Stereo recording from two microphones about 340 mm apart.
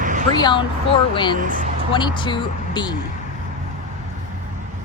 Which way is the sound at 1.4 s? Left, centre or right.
Right.